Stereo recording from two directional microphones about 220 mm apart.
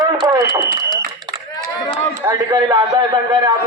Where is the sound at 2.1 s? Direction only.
15° right (ahead or behind).